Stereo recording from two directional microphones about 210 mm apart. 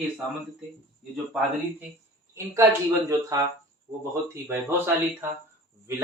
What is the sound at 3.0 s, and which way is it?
A man's voice, 15° right (ahead or behind).